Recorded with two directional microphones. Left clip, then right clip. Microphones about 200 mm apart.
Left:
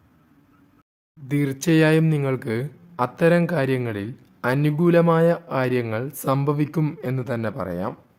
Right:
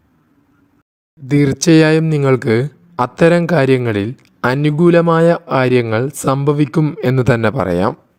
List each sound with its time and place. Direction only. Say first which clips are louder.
1.3 s speech: right 10 dB; 30° right (ahead or behind)
7.0 s speech: right 13 dB; 40° right (ahead or behind)